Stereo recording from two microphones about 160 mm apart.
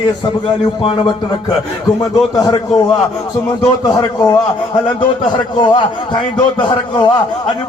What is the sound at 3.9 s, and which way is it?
A man's voice, 25° left (ahead or behind).